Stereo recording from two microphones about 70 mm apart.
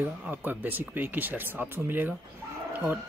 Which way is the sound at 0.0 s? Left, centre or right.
Right.